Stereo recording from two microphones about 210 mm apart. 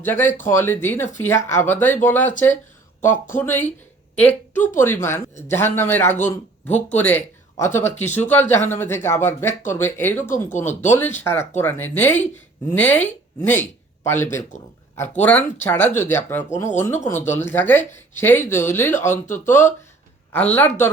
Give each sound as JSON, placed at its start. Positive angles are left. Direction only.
{"t": 0.0, "sound": "speech", "side_deg": 10}
{"t": 3.3, "sound": "a woman's voice", "side_deg": 10}
{"t": 10.2, "sound": "speech", "side_deg": 40}
{"t": 10.9, "sound": "speech", "side_deg": 10}